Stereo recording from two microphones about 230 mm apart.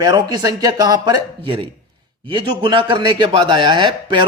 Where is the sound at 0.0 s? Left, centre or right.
Centre.